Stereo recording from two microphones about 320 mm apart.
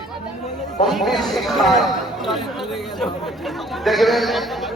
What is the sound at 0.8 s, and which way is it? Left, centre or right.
Speech, centre.